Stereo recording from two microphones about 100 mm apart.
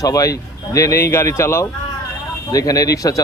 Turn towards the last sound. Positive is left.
turn(degrees=35)  # may be behind; listen again after turning